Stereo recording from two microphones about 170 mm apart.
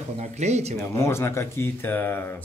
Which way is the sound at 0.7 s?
15° left (ahead or behind).